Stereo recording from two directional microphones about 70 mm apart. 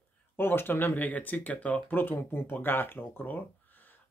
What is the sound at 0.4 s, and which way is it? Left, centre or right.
Speech, left.